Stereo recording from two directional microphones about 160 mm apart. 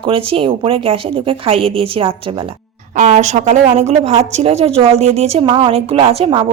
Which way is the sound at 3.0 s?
45° right (ahead or behind).